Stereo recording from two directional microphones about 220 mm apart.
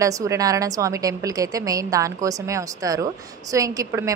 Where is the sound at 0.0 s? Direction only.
15° right (ahead or behind).